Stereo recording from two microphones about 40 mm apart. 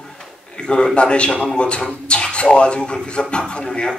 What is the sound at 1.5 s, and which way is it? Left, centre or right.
A man's voice, left.